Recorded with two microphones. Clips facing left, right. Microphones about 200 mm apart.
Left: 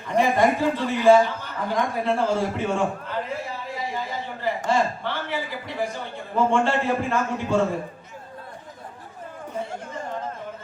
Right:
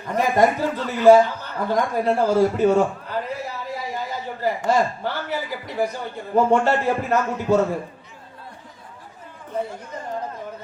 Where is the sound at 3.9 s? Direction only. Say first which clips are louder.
Right 1 dB; 40° right (ahead or behind).